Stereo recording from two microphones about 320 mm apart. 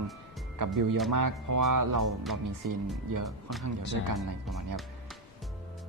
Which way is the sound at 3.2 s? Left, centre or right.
Centre.